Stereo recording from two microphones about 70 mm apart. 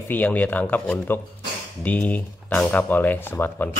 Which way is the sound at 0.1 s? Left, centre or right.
Left.